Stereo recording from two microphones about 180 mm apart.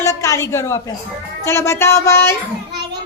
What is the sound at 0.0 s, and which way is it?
A woman's voice, 15° left (ahead or behind).